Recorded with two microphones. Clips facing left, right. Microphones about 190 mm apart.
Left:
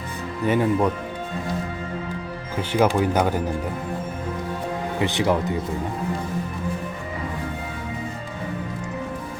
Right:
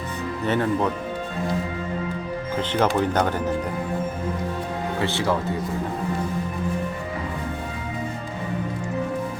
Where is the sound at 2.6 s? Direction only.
10° left (ahead or behind).